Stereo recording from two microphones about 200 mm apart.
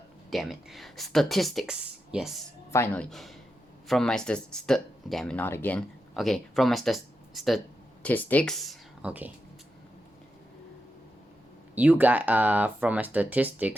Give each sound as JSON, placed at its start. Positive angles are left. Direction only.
{"t": 0.3, "sound": "speech", "side_deg": 0}
{"t": 2.7, "sound": "speech", "side_deg": 10}
{"t": 11.7, "sound": "speech", "side_deg": -10}